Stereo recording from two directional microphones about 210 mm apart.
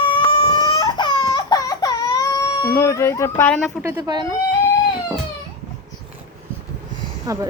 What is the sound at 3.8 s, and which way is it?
Speech, 20° right (ahead or behind).